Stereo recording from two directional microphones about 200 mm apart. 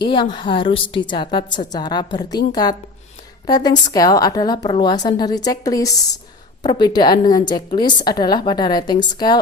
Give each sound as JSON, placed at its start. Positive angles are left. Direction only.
{"t": 0.0, "sound": "a woman's voice", "side_deg": 25}